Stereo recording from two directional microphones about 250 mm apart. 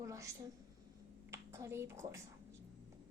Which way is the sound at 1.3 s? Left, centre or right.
Centre.